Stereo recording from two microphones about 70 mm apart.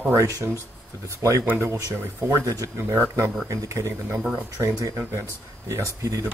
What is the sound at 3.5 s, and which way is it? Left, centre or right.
Speech, right.